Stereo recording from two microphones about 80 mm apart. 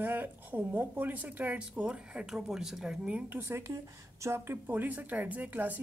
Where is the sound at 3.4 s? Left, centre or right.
Right.